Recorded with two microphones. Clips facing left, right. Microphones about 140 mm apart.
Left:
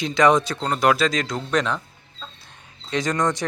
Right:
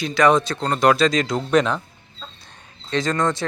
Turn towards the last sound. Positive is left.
turn(degrees=15)  # may be behind; listen again after turning